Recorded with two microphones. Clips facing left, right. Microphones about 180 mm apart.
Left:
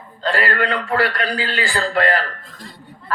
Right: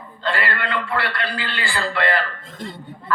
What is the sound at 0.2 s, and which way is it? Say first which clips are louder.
A woman's voice: left 4 dB; 40° left (ahead or behind).